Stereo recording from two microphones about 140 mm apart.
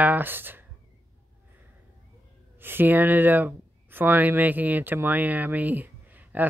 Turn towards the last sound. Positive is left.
turn(degrees=-10)  # may be behind; listen again after turning